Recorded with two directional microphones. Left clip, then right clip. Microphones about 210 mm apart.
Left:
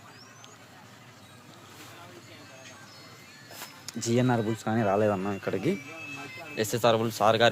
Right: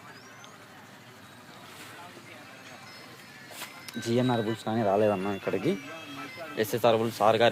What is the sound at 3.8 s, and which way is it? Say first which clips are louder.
Speech: left 1 dB; 5° left (ahead or behind).